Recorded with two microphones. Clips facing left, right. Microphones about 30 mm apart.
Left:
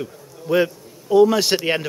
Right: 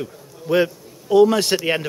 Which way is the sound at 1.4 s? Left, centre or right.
Centre.